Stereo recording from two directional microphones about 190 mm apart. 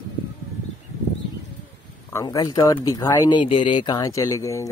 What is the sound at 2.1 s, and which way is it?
Speech, 20° left (ahead or behind).